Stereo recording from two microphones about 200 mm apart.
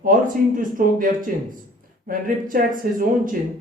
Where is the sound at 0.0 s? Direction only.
45° right (ahead or behind).